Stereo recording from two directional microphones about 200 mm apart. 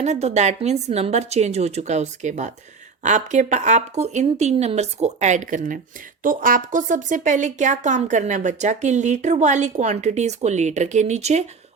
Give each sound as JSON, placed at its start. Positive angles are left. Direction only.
{"t": 0.0, "sound": "speech", "side_deg": -35}